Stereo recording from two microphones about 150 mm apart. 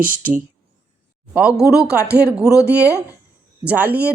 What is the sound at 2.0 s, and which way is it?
Speech, 90° right.